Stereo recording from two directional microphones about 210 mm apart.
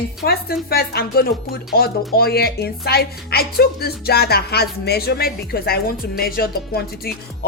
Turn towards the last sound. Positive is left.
turn(degrees=50)  # may be behind; listen again after turning